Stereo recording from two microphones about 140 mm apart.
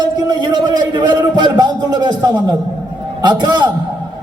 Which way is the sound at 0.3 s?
30° right (ahead or behind).